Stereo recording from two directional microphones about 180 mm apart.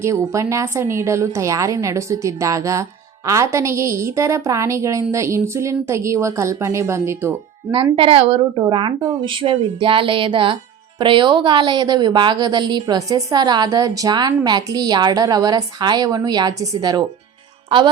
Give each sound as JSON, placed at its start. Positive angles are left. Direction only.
{"t": 0.0, "sound": "a woman's voice", "side_deg": -15}
{"t": 7.9, "sound": "a woman's voice", "side_deg": -30}
{"t": 8.6, "sound": "a woman's voice", "side_deg": -25}